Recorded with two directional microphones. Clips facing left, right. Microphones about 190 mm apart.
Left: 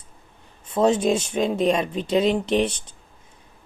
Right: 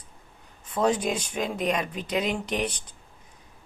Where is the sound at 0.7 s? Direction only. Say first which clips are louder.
Left 6 dB; 25° left (ahead or behind).